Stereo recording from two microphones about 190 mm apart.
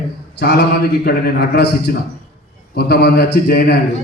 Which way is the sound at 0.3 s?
60° left (ahead or behind).